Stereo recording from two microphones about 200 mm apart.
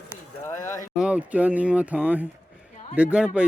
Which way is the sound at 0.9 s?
5° right (ahead or behind).